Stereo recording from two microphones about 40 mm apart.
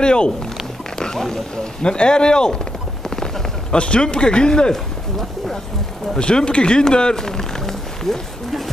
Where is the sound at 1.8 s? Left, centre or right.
Left.